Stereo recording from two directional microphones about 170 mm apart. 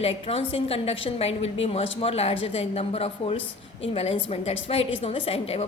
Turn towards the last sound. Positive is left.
turn(degrees=35)  # may be behind; listen again after turning